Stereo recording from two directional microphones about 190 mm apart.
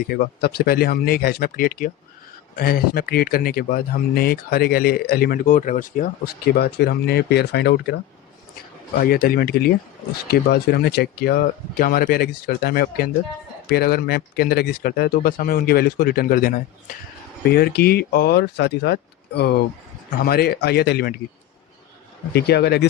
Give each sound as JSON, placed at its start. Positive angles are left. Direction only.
{"t": 0.1, "sound": "speech", "side_deg": 55}
{"t": 9.0, "sound": "speech", "side_deg": 50}
{"t": 22.3, "sound": "speech", "side_deg": 60}